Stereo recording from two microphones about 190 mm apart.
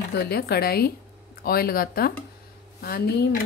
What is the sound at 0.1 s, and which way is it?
Speech, 55° left (ahead or behind).